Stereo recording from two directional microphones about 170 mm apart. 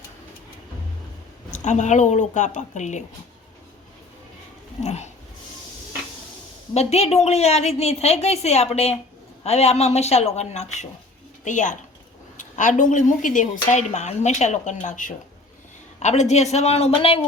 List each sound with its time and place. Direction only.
1.5 s speech: 45° left (ahead or behind)
4.8 s speech: 40° left (ahead or behind)
6.7 s a woman's voice: 40° left (ahead or behind)